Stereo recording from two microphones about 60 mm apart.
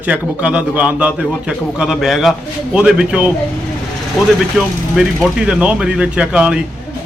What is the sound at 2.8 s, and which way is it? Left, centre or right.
Speech, centre.